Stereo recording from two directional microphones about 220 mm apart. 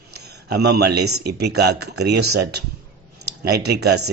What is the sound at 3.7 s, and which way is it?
Speech, 50° right (ahead or behind).